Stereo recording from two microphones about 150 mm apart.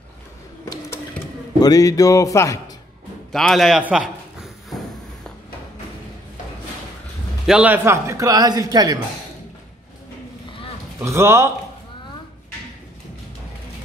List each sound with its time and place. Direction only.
1.6 s speech: 25° left (ahead or behind)
3.3 s a man's voice: centre (ahead or behind)
7.4 s speech: 10° right (ahead or behind); by 9.0 s 25° right (ahead or behind)
11.0 s speech: 15° right (ahead or behind)